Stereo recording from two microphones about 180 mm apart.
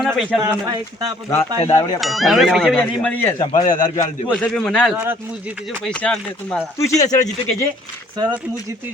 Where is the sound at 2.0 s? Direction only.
Centre (ahead or behind).